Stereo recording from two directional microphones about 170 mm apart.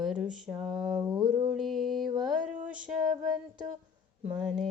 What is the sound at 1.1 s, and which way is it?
Mantra, 25° right (ahead or behind).